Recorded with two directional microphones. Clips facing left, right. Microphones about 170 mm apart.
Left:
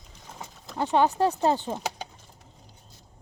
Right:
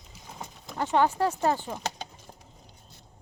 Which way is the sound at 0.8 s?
15° left (ahead or behind).